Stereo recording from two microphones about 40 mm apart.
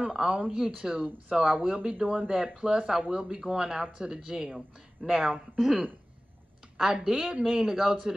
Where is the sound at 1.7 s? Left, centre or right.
Right.